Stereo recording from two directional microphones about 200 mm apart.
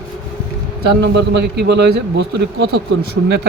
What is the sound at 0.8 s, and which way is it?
A man's voice, 60° right (ahead or behind).